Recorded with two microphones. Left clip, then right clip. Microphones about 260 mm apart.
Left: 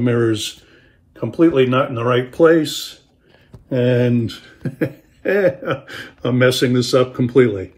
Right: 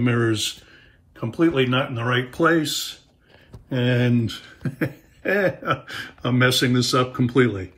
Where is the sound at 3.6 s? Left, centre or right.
Centre.